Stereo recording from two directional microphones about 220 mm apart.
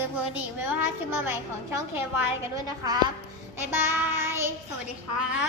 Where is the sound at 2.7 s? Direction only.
15° right (ahead or behind).